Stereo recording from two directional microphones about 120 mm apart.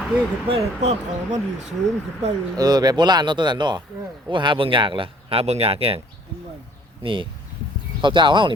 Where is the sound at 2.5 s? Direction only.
35° right (ahead or behind); by 5.9 s 55° right (ahead or behind).